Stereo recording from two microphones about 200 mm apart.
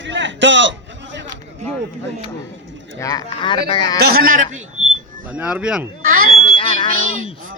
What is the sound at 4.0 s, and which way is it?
Speech, 45° right (ahead or behind).